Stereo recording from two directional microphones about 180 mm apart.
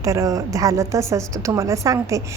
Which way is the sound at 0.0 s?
20° right (ahead or behind).